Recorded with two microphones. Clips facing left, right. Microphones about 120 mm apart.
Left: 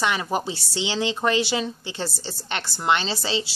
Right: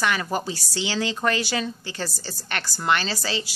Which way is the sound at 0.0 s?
20° left (ahead or behind).